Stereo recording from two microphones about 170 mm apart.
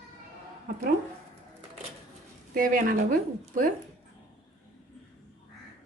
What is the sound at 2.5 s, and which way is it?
Speech, 55° right (ahead or behind).